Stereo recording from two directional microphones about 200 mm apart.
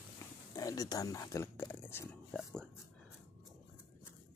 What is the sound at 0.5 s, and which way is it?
Speech, 15° left (ahead or behind).